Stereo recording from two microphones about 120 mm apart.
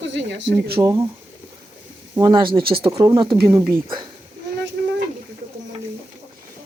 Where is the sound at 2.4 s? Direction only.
45° right (ahead or behind).